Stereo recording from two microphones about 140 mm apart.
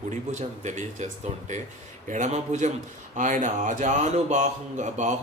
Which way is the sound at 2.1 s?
60° right (ahead or behind).